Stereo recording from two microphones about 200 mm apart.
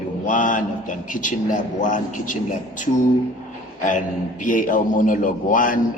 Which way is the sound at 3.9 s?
40° left (ahead or behind).